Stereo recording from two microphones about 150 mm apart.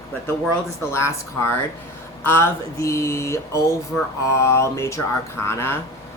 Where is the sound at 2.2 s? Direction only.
15° left (ahead or behind).